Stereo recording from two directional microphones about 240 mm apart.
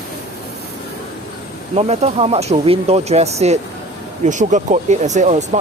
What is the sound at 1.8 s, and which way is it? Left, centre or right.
Speech, right.